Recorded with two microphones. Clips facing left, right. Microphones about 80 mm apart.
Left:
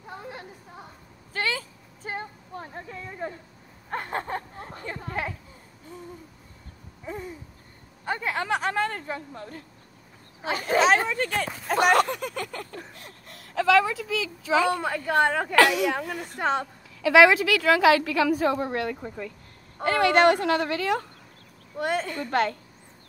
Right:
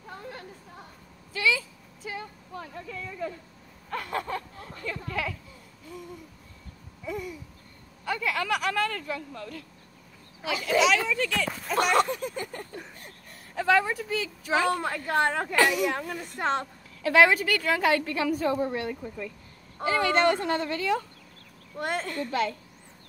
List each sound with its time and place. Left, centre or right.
0.0 s a sound: centre
1.3 s a sound: left
7.1 s babbling: left
8.0 s speech: left
10.4 s a child's voice: left
14.7 s a woman's voice: centre
15.5 s a woman's voice: left
16.3 s a woman's voice: centre
17.1 s a woman's voice: left
21.7 s a woman's voice: centre
22.2 s speech: left